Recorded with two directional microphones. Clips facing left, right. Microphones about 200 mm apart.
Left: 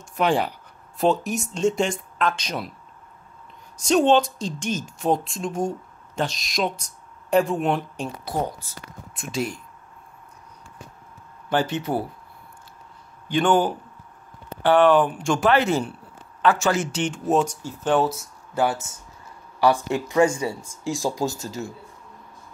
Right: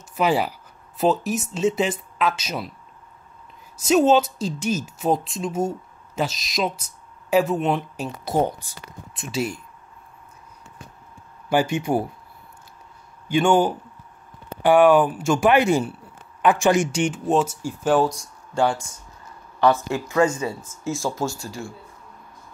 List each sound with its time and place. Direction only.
0.1 s speech: 5° right (ahead or behind)
3.7 s a woman's voice: 5° right (ahead or behind)
8.4 s speech: 25° right (ahead or behind)
9.1 s speech: centre (ahead or behind)
11.4 s speech: 10° right (ahead or behind)
13.3 s speech: 10° right (ahead or behind)
17.2 s a woman's voice: centre (ahead or behind); by 21.6 s 20° left (ahead or behind)